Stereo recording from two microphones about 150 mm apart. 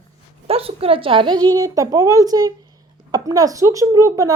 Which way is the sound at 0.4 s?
40° right (ahead or behind).